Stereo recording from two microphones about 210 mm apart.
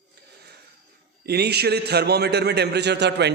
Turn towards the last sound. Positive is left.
turn(degrees=-55)  # may be behind; listen again after turning